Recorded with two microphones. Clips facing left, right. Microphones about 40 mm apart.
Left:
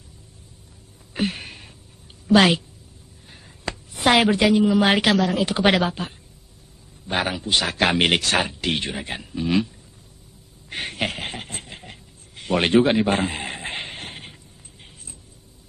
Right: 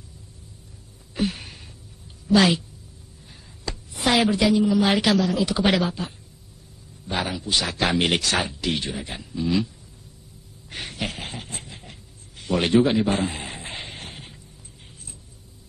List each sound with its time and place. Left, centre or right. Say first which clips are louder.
1.1 s a sound: left 1 dB; left
2.2 s a woman's voice: left 2 dB; left
10.7 s speech: left 4 dB; left